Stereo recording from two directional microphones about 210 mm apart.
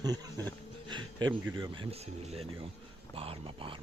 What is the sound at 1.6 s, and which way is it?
Speech, 25° right (ahead or behind).